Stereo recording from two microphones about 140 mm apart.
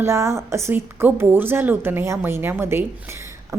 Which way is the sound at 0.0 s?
20° right (ahead or behind).